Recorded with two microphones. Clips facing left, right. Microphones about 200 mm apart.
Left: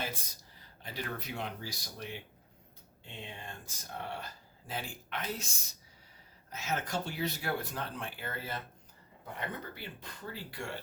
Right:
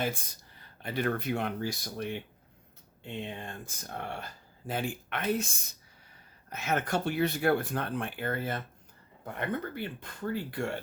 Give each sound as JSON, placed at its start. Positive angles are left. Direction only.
{"t": 0.5, "sound": "speech", "side_deg": -60}
{"t": 3.2, "sound": "speech", "side_deg": -55}